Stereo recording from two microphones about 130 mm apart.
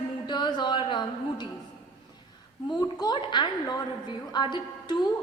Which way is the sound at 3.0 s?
35° left (ahead or behind).